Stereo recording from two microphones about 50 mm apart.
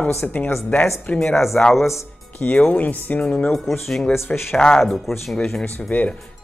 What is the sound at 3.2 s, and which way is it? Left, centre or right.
Speech, left.